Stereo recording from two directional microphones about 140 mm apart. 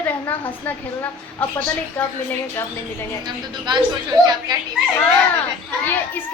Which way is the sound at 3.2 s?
35° right (ahead or behind).